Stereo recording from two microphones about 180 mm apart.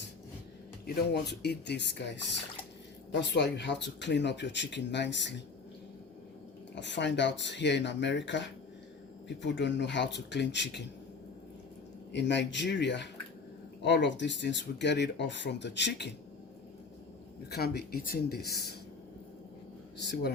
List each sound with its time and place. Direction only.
1.1 s speech: 65° left (ahead or behind)
6.7 s speech: 80° left
12.1 s speech: 75° left (ahead or behind)
17.5 s speech: 60° left (ahead or behind)
20.0 s speech: 70° left (ahead or behind)